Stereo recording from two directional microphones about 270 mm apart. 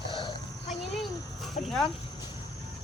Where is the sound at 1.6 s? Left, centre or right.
Centre.